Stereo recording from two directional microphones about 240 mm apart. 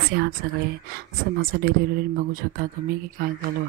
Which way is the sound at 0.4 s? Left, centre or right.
Right.